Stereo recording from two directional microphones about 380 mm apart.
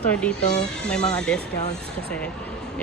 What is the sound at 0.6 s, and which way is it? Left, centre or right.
Speech, centre.